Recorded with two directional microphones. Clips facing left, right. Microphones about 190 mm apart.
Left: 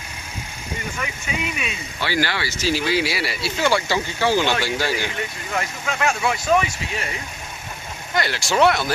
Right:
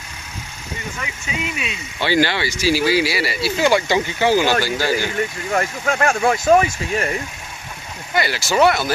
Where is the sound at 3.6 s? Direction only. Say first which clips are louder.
Right 3 dB; 15° right (ahead or behind); by 5.1 s centre (ahead or behind).